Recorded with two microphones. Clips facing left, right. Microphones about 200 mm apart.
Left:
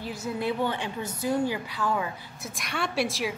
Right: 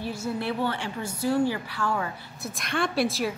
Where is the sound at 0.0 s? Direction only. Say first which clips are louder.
Right 1 dB; 15° left (ahead or behind).